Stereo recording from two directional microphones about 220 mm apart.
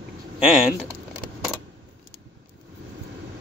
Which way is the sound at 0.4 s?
5° right (ahead or behind).